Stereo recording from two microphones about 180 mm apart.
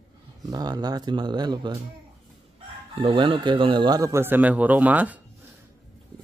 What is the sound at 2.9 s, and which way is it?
Speech, 25° right (ahead or behind).